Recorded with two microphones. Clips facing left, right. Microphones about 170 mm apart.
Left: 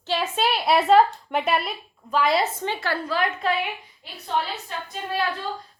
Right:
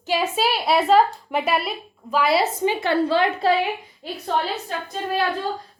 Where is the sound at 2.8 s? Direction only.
25° right (ahead or behind); by 5.0 s 40° right (ahead or behind).